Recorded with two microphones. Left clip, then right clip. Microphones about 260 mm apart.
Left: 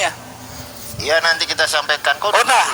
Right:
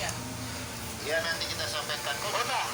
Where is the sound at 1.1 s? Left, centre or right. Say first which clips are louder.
Left 15 dB; left.